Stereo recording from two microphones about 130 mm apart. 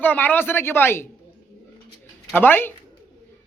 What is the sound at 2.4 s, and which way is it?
Speech, 15° left (ahead or behind).